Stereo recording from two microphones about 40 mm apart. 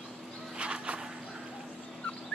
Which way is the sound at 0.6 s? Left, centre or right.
Right.